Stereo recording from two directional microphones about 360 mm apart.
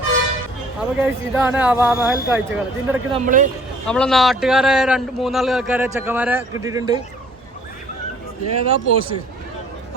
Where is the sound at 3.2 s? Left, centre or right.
Right.